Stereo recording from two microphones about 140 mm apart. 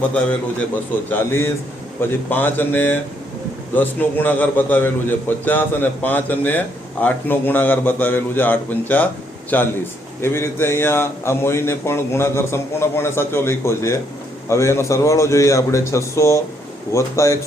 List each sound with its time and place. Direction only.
1.1 s a man's voice: 15° left (ahead or behind)